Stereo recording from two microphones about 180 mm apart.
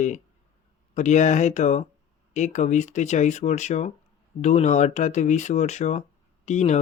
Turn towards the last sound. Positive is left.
turn(degrees=40)  # may be behind; listen again after turning